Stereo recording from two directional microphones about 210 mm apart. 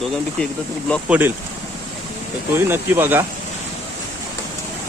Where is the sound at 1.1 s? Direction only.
10° right (ahead or behind).